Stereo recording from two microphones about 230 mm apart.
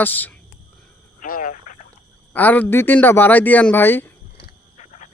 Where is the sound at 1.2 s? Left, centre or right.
Left.